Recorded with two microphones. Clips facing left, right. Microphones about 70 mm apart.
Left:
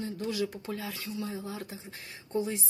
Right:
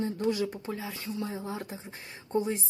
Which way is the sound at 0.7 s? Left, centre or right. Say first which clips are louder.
Right 1 dB; centre.